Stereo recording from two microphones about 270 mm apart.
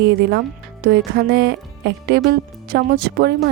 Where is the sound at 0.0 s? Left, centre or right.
Right.